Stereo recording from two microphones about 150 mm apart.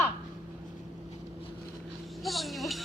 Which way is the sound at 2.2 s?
Centre (ahead or behind).